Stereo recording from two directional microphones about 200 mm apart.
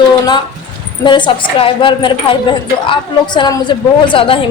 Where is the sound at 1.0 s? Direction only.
25° left (ahead or behind).